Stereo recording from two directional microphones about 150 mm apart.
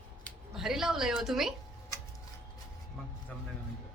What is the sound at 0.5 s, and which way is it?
A woman's voice, centre (ahead or behind).